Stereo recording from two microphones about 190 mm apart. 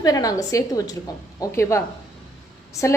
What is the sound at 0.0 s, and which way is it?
A woman's voice, 20° left (ahead or behind).